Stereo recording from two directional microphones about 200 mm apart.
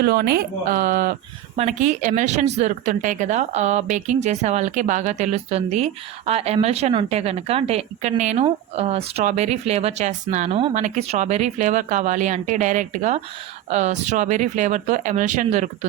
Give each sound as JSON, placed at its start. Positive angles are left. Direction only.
{"t": 0.0, "sound": "speech", "side_deg": -50}
{"t": 1.5, "sound": "speech", "side_deg": -35}